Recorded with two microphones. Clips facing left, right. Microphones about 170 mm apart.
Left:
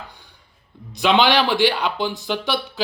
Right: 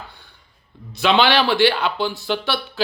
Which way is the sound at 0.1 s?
15° left (ahead or behind).